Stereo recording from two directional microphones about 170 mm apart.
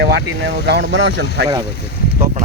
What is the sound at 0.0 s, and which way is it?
Speech, 85° right.